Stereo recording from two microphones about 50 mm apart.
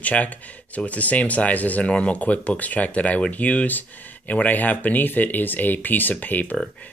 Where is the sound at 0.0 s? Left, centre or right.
Left.